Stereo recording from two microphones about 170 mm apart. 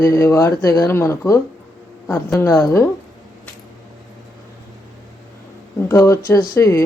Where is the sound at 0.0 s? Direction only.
15° left (ahead or behind).